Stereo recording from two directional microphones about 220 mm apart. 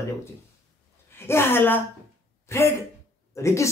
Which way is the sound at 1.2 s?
10° left (ahead or behind).